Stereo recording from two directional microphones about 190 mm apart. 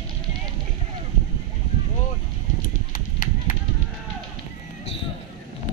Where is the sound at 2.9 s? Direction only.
45° left (ahead or behind).